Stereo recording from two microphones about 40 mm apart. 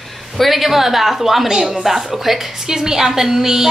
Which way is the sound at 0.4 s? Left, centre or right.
Centre.